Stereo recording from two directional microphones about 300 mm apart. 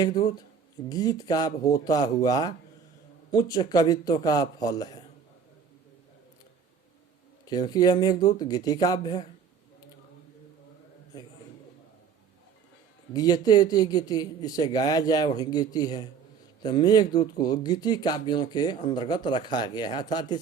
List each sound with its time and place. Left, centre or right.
0.0 s speech: centre
7.4 s speech: centre
13.1 s speech: centre